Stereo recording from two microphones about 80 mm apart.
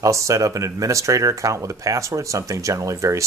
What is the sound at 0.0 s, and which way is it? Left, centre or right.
Speech, right.